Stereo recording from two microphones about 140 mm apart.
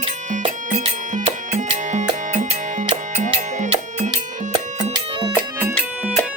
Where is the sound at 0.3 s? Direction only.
60° right (ahead or behind).